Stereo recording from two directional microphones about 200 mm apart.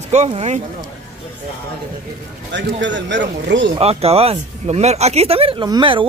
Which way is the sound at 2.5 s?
60° right (ahead or behind).